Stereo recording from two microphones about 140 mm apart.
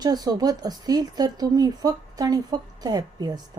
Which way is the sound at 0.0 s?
30° right (ahead or behind).